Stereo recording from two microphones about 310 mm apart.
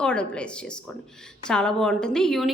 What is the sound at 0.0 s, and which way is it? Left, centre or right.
Speech, centre.